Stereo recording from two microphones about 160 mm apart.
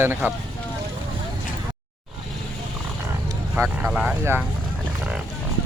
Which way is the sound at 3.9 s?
5° right (ahead or behind).